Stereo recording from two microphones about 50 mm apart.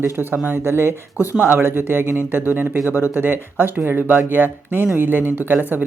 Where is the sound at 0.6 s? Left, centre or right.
Right.